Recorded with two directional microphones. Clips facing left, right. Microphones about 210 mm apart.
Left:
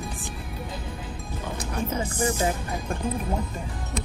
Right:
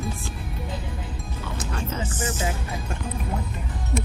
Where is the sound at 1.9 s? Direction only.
10° left (ahead or behind).